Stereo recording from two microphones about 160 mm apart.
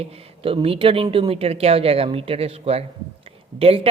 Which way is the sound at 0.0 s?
35° right (ahead or behind).